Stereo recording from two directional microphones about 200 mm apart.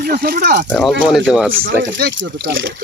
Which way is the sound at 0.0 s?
50° right (ahead or behind).